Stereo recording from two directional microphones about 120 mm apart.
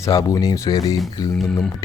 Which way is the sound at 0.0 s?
30° left (ahead or behind).